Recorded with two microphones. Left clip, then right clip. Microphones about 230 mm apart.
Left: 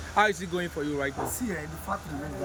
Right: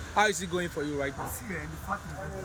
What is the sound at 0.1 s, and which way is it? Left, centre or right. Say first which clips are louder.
Speech: left 2 dB; centre.